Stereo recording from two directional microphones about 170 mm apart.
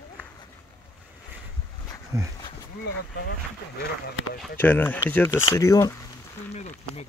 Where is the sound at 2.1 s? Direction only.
20° right (ahead or behind).